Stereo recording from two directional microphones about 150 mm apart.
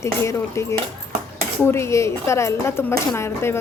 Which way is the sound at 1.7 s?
20° left (ahead or behind).